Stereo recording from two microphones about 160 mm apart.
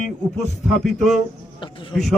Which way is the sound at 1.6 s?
30° left (ahead or behind).